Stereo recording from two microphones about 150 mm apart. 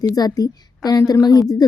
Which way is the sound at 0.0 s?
25° left (ahead or behind).